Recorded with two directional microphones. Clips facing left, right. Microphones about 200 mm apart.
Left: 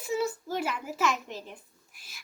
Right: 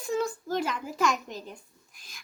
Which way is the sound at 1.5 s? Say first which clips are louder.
Right 1 dB; 5° left (ahead or behind).